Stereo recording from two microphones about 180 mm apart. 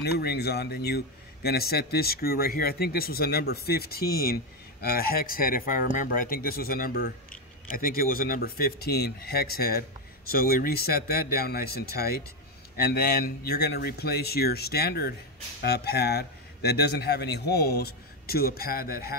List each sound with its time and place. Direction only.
0.0 s a man's voice: 60° left (ahead or behind)